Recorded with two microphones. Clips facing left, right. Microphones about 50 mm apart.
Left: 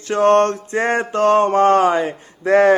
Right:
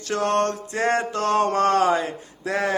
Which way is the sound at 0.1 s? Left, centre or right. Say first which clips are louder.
Left 8 dB; left.